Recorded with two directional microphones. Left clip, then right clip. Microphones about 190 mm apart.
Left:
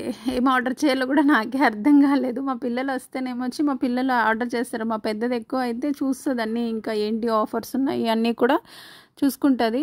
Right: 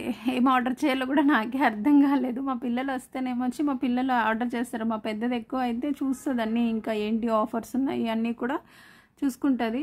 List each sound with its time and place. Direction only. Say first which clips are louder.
0.0 s a woman's voice: left 2 dB; 25° left (ahead or behind)